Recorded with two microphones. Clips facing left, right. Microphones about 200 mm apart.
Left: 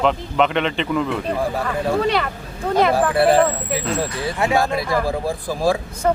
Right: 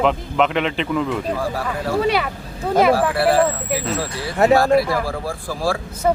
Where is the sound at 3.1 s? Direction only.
20° left (ahead or behind).